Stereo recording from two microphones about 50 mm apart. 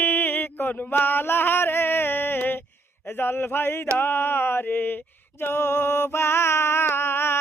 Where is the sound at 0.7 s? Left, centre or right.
Left.